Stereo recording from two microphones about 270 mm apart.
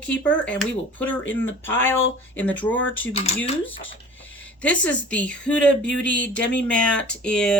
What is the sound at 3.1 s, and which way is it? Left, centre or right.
Speech, left.